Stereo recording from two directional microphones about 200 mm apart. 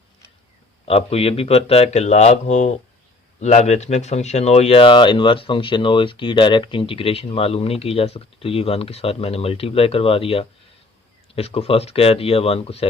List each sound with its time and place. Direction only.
0.9 s a man's voice: 30° left (ahead or behind)